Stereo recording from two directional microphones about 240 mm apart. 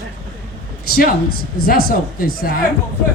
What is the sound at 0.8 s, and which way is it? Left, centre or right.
A man's voice, left.